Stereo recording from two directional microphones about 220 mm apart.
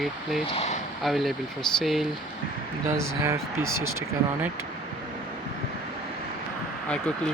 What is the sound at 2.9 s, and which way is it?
Speech, 15° right (ahead or behind).